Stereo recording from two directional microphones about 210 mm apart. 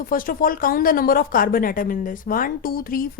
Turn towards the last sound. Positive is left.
turn(degrees=45)  # may be behind; listen again after turning